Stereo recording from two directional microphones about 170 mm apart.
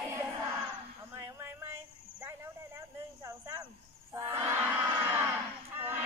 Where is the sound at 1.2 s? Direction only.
15° right (ahead or behind).